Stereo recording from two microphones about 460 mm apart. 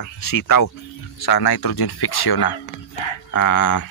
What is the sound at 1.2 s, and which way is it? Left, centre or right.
Speech, left.